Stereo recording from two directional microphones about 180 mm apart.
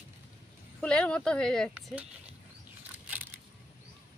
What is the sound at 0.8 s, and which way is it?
Speech, 5° left (ahead or behind).